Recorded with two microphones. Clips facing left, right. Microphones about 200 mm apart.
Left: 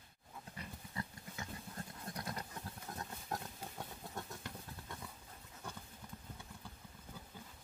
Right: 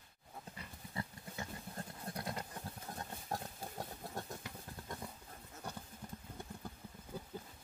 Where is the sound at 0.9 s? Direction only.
30° right (ahead or behind).